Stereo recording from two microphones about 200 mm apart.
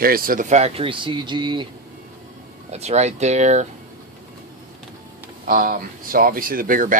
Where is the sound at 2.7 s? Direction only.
35° right (ahead or behind).